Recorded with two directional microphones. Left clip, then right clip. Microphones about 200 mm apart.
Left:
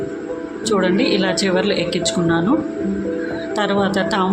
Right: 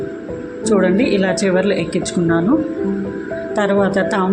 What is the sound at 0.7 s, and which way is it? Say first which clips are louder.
Speech: right 2 dB; 15° right (ahead or behind).